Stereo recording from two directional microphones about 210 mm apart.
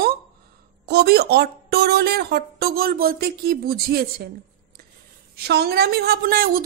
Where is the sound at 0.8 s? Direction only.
50° right (ahead or behind).